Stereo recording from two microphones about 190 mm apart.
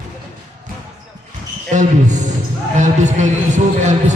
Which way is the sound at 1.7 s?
40° right (ahead or behind).